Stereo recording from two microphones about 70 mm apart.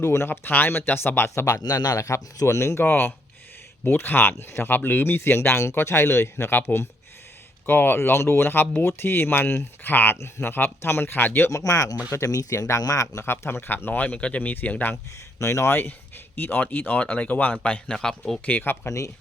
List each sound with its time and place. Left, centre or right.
0.0 s speech: left
1.6 s speech: left
2.0 s speech: left
2.8 s speech: left
10.2 s speech: left
11.5 s speech: left
13.2 s speech: left
15.4 s speech: left; by 18.3 s centre
18.4 s speech: left
18.9 s speech: left